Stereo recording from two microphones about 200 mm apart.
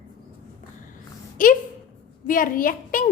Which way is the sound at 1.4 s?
40° left (ahead or behind).